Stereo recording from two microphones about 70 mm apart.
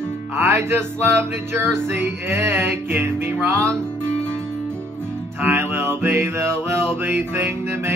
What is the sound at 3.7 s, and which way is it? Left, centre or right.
Music, centre.